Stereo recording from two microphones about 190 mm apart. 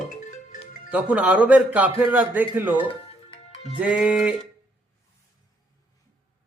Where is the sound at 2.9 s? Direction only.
30° left (ahead or behind).